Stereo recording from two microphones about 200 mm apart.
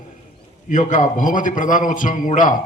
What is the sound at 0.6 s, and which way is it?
A man's voice, 40° left (ahead or behind).